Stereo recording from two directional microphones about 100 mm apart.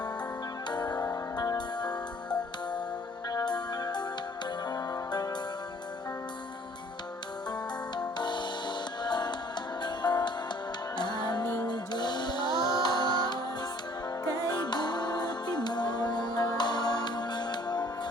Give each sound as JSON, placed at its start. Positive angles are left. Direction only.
{"t": 0.7, "sound": "music", "side_deg": 45}
{"t": 3.2, "sound": "music", "side_deg": 45}
{"t": 7.5, "sound": "music", "side_deg": 45}